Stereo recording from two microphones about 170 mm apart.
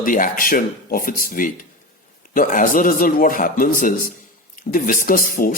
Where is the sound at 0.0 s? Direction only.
55° left (ahead or behind).